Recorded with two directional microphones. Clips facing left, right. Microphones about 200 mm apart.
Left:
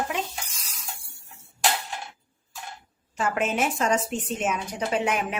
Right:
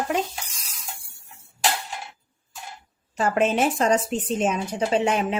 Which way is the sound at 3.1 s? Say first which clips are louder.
Right 5 dB; 35° right (ahead or behind).